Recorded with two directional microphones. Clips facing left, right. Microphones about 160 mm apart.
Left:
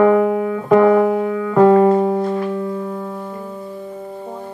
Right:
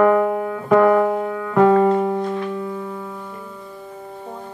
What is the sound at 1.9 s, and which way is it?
Music, 35° left (ahead or behind).